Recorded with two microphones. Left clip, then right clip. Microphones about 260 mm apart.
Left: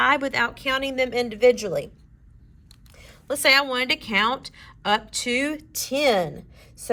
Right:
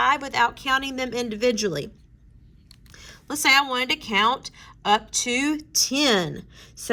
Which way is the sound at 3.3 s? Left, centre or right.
Centre.